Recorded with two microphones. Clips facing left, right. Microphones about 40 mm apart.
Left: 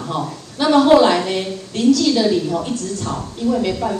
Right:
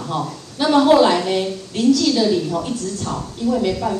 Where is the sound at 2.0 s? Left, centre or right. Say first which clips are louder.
Left 1 dB; left.